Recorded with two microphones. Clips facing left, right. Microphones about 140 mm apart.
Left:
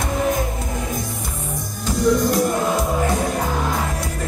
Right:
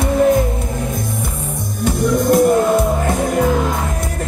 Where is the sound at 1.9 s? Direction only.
55° right (ahead or behind).